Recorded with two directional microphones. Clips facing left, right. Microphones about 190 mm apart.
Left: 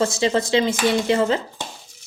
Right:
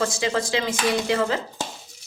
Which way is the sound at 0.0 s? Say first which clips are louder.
Left 4 dB; 25° left (ahead or behind).